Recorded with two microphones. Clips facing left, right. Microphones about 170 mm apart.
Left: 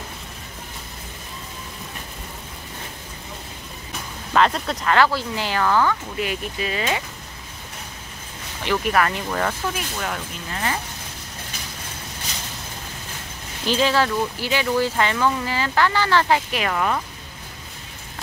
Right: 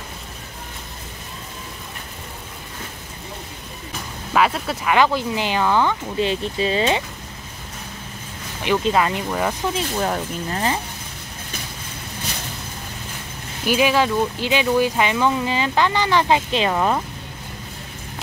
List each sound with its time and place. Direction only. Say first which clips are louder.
4.3 s speech: even; 5° right (ahead or behind)
4.9 s speech: right 2 dB; 20° right (ahead or behind)
8.6 s speech: right 2 dB; 20° right (ahead or behind)
9.8 s speech: right 6 dB; 35° right (ahead or behind)
13.7 s speech: right 2 dB; 15° right (ahead or behind)